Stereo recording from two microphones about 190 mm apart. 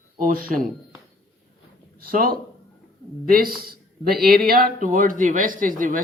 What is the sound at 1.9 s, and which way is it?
Speech, 50° right (ahead or behind).